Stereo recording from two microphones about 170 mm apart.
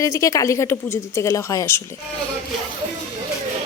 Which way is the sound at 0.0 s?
20° left (ahead or behind).